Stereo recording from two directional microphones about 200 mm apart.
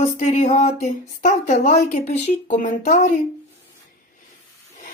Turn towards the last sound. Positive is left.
turn(degrees=40)  # may be behind; listen again after turning